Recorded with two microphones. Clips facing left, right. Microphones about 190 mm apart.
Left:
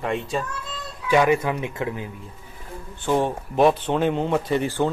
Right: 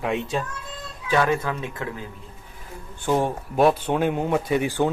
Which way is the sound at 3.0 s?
10° right (ahead or behind).